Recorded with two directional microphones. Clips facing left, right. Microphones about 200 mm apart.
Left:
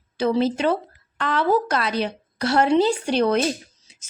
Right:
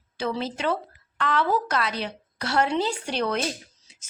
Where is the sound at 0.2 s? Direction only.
35° left (ahead or behind).